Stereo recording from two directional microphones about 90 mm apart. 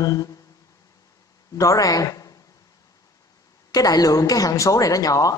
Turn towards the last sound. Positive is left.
turn(degrees=40)  # may be behind; listen again after turning